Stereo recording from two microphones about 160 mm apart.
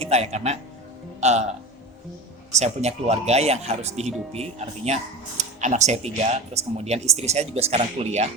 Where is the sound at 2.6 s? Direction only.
45° right (ahead or behind).